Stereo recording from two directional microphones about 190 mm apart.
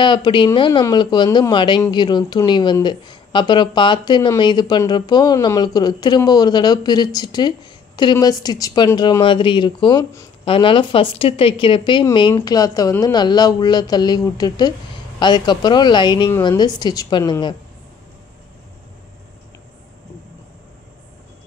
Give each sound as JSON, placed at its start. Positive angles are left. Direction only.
{"t": 0.0, "sound": "speech", "side_deg": 25}